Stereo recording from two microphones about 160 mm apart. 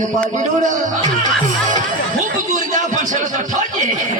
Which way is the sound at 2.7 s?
50° right (ahead or behind).